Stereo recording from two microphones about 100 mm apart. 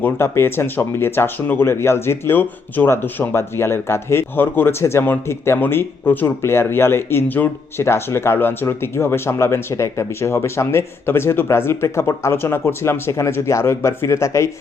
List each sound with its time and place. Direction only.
0.0 s speech: 25° left (ahead or behind)